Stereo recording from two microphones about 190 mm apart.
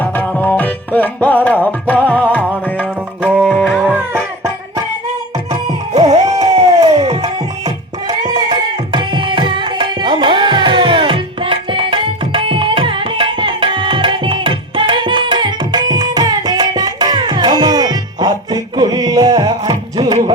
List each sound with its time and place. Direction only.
0.0 s tabla: 10° left (ahead or behind)
2.0 s music: 10° left (ahead or behind)
3.2 s music: 5° right (ahead or behind)
5.9 s music: 30° right (ahead or behind)
6.2 s crowd: 20° right (ahead or behind)
8.0 s tabla: 20° right (ahead or behind)